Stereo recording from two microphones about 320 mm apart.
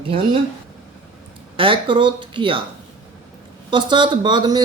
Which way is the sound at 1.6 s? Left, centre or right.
Centre.